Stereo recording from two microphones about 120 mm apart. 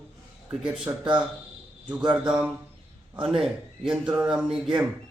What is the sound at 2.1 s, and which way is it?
Speech, 10° right (ahead or behind).